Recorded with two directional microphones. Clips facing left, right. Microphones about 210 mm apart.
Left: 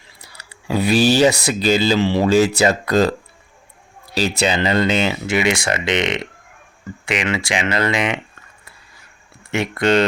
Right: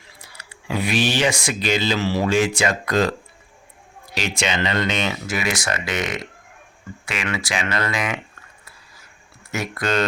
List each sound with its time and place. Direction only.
0.2 s speech: 35° left (ahead or behind)
9.6 s speech: 25° left (ahead or behind)